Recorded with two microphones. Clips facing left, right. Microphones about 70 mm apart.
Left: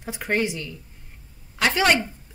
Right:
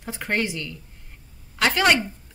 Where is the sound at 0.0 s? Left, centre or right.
Centre.